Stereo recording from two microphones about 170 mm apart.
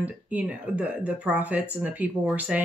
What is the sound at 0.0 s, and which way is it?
Speech, 10° right (ahead or behind).